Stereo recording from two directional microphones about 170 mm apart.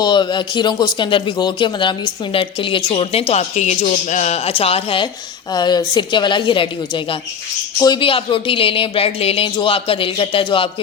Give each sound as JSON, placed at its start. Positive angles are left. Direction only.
{"t": 0.0, "sound": "a man's voice", "side_deg": 25}